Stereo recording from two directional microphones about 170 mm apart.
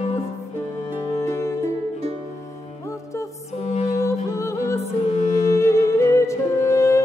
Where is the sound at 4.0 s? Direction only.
15° left (ahead or behind).